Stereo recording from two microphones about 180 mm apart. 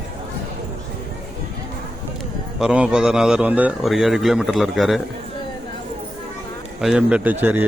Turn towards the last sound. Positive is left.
turn(degrees=-10)  # may be behind; listen again after turning